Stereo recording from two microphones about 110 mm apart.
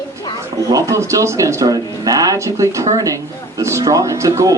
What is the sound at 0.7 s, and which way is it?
Speech, 30° right (ahead or behind).